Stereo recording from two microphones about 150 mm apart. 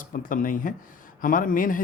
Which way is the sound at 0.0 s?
65° left (ahead or behind).